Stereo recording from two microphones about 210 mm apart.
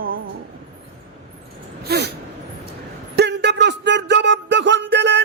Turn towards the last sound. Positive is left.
turn(degrees=-60)  # may be behind; listen again after turning